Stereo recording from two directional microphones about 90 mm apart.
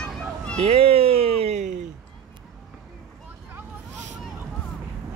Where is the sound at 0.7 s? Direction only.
90° right.